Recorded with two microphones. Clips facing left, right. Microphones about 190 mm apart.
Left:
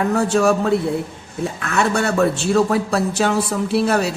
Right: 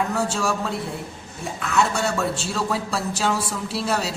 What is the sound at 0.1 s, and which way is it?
A man's voice, 60° left (ahead or behind).